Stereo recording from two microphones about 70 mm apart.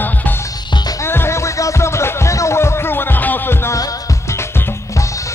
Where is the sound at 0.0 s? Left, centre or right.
Left.